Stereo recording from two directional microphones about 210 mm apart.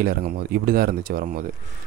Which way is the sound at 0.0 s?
45° right (ahead or behind).